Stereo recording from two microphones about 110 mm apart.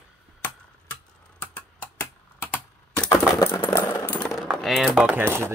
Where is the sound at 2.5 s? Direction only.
15° left (ahead or behind).